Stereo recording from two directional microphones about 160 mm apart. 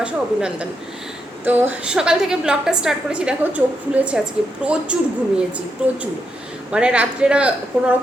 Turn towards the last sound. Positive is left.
turn(degrees=-5)  # may be behind; listen again after turning